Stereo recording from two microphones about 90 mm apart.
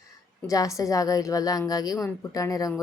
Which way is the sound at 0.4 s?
40° left (ahead or behind).